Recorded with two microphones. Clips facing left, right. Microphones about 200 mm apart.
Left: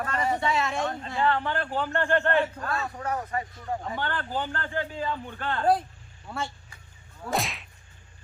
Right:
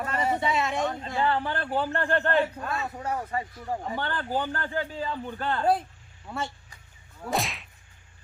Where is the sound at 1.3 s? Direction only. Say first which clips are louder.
Even; 35° right (ahead or behind).